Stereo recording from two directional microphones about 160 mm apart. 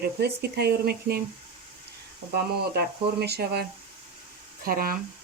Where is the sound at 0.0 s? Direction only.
85° right.